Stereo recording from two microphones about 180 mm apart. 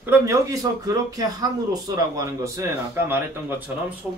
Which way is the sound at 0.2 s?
15° right (ahead or behind).